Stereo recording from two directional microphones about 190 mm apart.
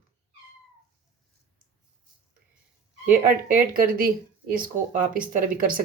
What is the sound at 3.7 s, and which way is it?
Speech, 50° right (ahead or behind).